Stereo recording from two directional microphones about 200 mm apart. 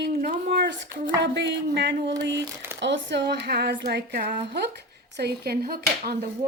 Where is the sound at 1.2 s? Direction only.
60° right (ahead or behind).